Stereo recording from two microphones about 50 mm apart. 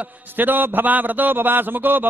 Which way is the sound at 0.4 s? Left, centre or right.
Right.